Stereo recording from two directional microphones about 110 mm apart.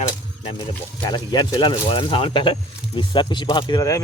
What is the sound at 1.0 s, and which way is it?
Speech, 40° left (ahead or behind).